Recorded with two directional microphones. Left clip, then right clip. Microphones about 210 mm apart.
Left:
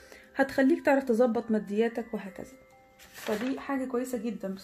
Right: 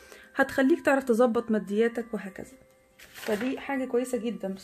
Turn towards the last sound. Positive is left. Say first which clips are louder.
# right 3 dB
turn(degrees=-35)  # may be behind; listen again after turning